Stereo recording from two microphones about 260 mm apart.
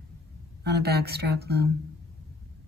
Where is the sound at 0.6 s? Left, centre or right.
Right.